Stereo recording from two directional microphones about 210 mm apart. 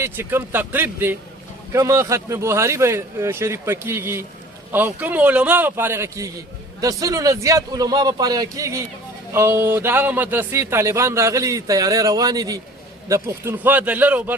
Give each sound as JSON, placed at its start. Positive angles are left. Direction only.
{"t": 0.0, "sound": "a man's voice", "side_deg": -10}